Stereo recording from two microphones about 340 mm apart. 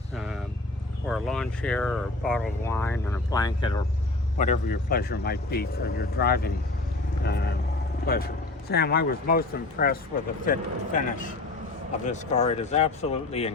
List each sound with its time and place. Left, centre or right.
1.0 s speech: centre